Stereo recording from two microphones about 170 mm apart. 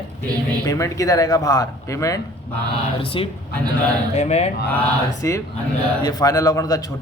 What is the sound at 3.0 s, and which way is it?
Speech, 30° left (ahead or behind).